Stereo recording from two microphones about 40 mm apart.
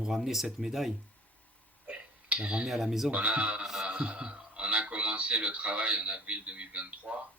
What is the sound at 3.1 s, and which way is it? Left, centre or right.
Speech, right.